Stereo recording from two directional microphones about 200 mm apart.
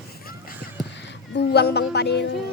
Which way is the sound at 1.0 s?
60° left (ahead or behind).